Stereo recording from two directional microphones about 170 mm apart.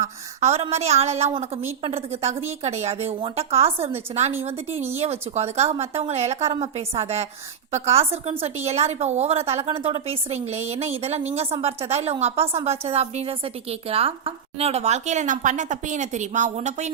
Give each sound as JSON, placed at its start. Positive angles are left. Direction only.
{"t": 0.0, "sound": "a woman's voice", "side_deg": -40}